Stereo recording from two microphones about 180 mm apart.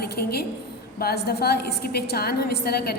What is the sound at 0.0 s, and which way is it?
A woman's voice, 60° left (ahead or behind).